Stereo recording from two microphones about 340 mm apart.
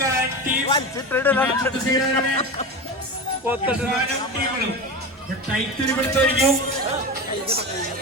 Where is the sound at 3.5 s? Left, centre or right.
Centre.